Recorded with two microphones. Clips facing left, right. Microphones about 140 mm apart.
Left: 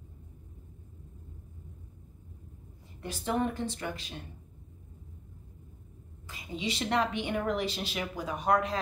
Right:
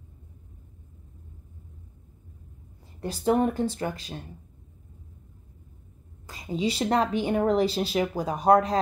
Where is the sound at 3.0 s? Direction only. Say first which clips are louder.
Right 7 dB; 35° right (ahead or behind).